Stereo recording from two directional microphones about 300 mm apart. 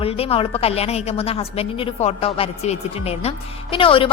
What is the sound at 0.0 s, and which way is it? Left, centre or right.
A woman's voice, centre.